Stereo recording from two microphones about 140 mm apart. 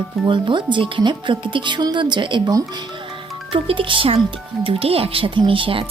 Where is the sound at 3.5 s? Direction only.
40° right (ahead or behind).